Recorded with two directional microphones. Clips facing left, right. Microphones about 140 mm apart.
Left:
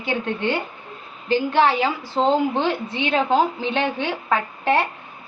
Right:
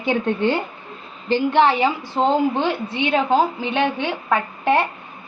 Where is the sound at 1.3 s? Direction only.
25° right (ahead or behind).